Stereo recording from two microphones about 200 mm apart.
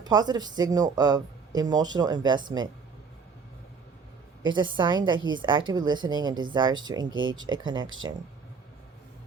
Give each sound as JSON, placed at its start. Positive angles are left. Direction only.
{"t": 0.0, "sound": "speech", "side_deg": -20}
{"t": 4.5, "sound": "speech", "side_deg": -20}
{"t": 7.1, "sound": "speech", "side_deg": -75}
{"t": 7.6, "sound": "speech", "side_deg": -20}